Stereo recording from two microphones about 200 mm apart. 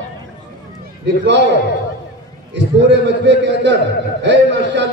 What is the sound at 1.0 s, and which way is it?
Speech, 60° right (ahead or behind).